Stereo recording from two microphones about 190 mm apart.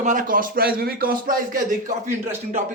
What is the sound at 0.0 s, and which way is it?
A man's voice, 45° right (ahead or behind).